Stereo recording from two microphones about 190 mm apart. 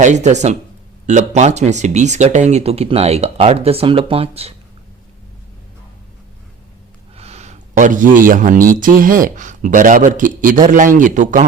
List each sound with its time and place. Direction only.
0.0 s speech: 40° right (ahead or behind)
7.2 s a man's voice: 35° right (ahead or behind)